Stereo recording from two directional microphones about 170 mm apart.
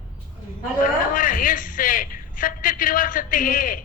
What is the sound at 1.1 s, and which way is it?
A man's voice, 55° left (ahead or behind).